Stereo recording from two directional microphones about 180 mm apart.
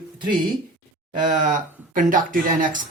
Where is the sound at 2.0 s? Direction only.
50° right (ahead or behind).